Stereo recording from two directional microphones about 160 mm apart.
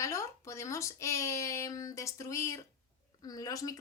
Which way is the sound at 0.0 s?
20° left (ahead or behind).